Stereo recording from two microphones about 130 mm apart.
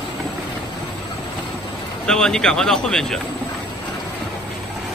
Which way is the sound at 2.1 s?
5° left (ahead or behind).